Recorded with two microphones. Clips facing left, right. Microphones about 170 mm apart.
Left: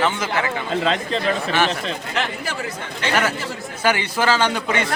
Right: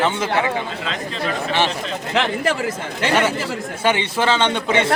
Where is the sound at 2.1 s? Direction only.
90° right.